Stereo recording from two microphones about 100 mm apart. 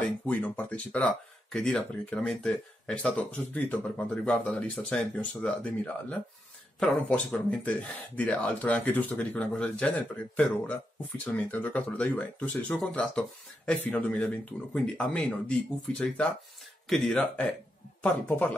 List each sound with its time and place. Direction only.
0.2 s speech: 15° left (ahead or behind)
18.0 s speech: 15° left (ahead or behind)